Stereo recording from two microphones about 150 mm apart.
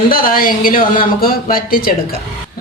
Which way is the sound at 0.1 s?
70° left (ahead or behind).